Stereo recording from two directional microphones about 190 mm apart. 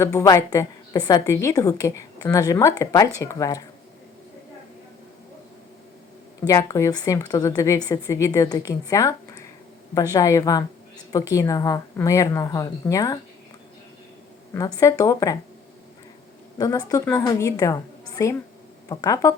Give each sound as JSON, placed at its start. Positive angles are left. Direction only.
{"t": 0.0, "sound": "a woman's voice", "side_deg": 15}
{"t": 6.5, "sound": "a woman's voice", "side_deg": 15}
{"t": 14.5, "sound": "a woman's voice", "side_deg": 15}
{"t": 16.6, "sound": "a woman's voice", "side_deg": 20}